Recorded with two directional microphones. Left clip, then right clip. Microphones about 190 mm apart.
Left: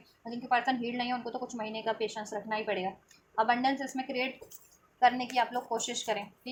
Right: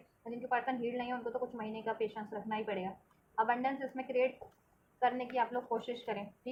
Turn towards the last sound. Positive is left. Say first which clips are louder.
# left 6 dB
turn(degrees=25)  # may be behind; listen again after turning